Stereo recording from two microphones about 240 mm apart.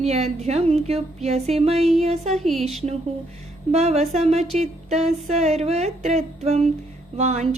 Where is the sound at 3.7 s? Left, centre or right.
Right.